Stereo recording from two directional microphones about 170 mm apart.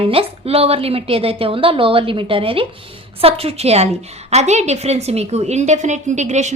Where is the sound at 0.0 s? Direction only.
35° right (ahead or behind).